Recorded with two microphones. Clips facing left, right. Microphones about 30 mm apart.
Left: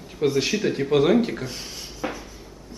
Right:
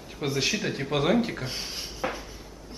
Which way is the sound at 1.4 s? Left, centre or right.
Right.